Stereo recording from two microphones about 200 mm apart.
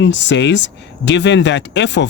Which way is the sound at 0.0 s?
65° left (ahead or behind).